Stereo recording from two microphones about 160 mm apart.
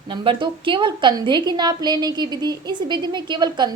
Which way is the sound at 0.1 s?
30° right (ahead or behind).